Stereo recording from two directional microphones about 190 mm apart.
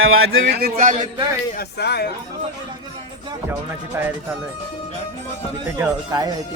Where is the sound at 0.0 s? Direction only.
90° right.